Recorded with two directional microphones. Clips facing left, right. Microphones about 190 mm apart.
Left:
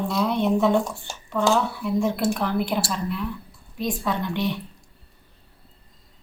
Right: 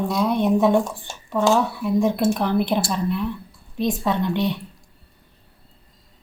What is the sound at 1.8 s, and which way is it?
A woman's voice, 20° right (ahead or behind).